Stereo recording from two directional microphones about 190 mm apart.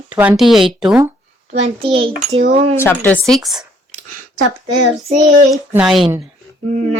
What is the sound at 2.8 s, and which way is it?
Speech, 10° left (ahead or behind).